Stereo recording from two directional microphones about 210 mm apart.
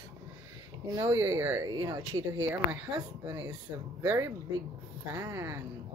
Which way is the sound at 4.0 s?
15° right (ahead or behind).